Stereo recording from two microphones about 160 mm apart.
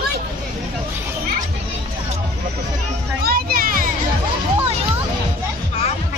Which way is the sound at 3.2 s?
65° right (ahead or behind).